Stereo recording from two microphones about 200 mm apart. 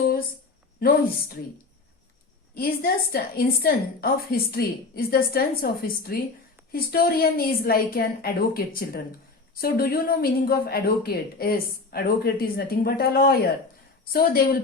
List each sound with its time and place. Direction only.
0.8 s speech: 50° left (ahead or behind)
2.6 s speech: 50° left (ahead or behind)